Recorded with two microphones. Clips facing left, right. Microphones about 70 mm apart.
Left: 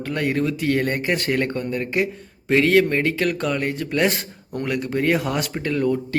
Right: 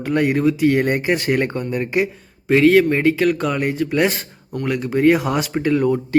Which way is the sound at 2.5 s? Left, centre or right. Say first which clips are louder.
Right 4 dB; centre.